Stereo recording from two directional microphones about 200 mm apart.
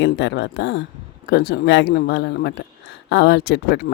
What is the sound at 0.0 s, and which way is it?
Speech, 55° left (ahead or behind).